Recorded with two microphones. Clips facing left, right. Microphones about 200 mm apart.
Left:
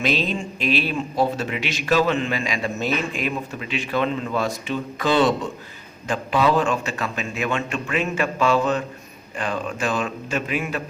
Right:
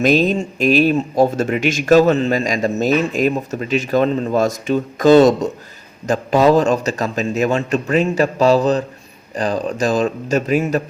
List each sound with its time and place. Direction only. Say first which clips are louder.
0.0 s a man's voice: right 9 dB; 45° right (ahead or behind)